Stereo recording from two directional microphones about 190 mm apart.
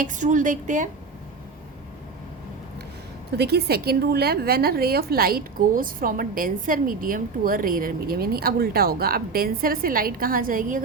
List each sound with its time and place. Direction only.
0.0 s a woman's voice: 40° right (ahead or behind)
3.3 s a woman's voice: 55° right (ahead or behind)